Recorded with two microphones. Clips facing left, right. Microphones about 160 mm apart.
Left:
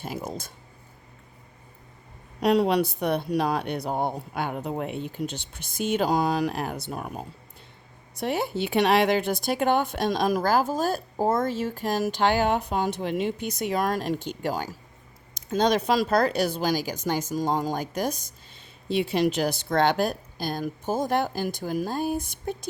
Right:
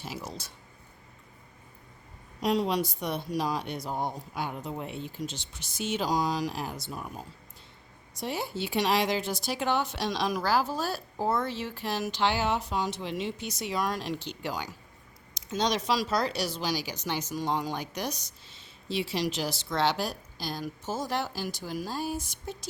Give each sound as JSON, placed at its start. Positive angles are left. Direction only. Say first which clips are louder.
{"t": 0.0, "sound": "speech", "louder": "left 6 dB", "side_deg": 50}
{"t": 2.4, "sound": "speech", "louder": "left 6 dB", "side_deg": 65}